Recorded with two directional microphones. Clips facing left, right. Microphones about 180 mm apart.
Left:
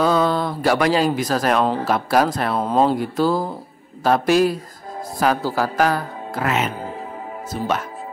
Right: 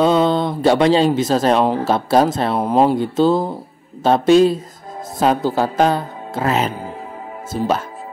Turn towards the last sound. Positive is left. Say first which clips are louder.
# right 4 dB
turn(degrees=0)  # may be behind; listen again after turning